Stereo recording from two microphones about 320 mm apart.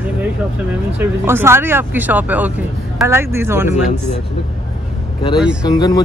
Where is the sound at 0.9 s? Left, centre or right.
Centre.